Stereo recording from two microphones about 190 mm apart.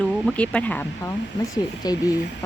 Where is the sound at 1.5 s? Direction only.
20° left (ahead or behind).